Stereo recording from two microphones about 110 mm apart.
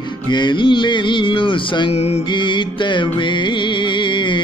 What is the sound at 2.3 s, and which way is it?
Music, 45° left (ahead or behind).